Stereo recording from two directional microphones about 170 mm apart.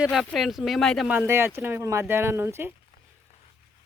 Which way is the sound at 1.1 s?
15° right (ahead or behind).